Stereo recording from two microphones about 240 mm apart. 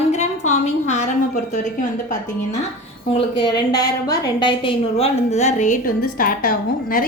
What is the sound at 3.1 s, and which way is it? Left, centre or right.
A woman's voice, centre.